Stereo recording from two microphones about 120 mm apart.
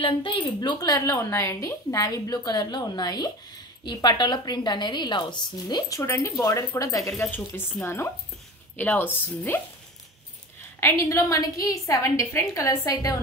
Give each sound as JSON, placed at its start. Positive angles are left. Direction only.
{"t": 0.0, "sound": "a woman's voice", "side_deg": 45}
{"t": 10.8, "sound": "a woman's voice", "side_deg": 20}